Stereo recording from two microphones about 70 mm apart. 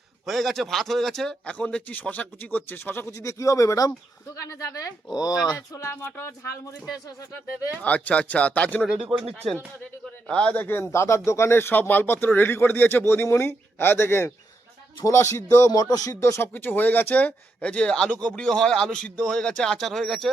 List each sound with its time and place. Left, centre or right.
0.3 s a man's voice: centre; by 3.1 s left
3.1 s speech: left
5.1 s speech: left
5.7 s speech: left
7.8 s speech: left
8.9 s speech: centre
10.2 s speech: centre
10.9 s speech: left
16.2 s speech: left
16.5 s a man's voice: left; by 20.3 s centre